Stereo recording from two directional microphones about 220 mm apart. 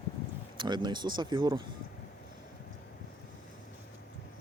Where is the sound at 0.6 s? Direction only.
20° right (ahead or behind).